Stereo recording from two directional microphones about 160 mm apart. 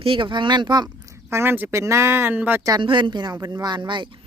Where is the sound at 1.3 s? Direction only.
15° right (ahead or behind).